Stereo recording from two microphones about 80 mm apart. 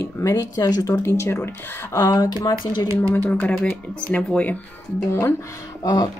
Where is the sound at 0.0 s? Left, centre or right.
Left.